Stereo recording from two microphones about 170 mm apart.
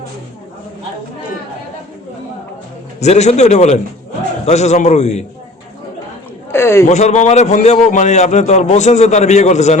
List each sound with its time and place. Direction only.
3.0 s a man's voice: 40° left (ahead or behind)
6.5 s a sound: 15° left (ahead or behind)
6.8 s a man's voice: 45° left (ahead or behind)